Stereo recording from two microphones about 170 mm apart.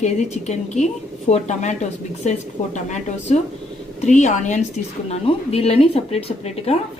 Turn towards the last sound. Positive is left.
turn(degrees=35)  # may be behind; listen again after turning